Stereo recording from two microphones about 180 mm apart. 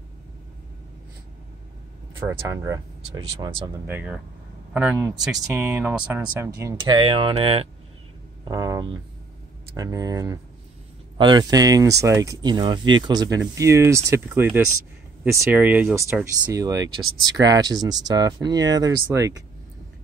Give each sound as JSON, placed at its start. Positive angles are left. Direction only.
{"t": 2.1, "sound": "speech", "side_deg": -15}
{"t": 3.8, "sound": "speech", "side_deg": -10}
{"t": 8.5, "sound": "speech", "side_deg": -20}